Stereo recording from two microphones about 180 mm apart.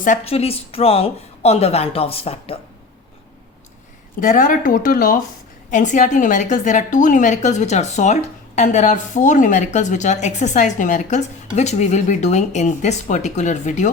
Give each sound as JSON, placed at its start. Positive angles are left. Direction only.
{"t": 0.0, "sound": "a woman's voice", "side_deg": 40}
{"t": 4.2, "sound": "a woman's voice", "side_deg": 45}